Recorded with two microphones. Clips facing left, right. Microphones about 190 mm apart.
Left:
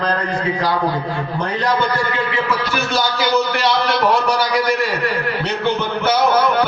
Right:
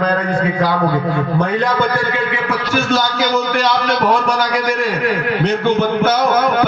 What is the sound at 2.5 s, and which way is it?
Speech, 50° right (ahead or behind).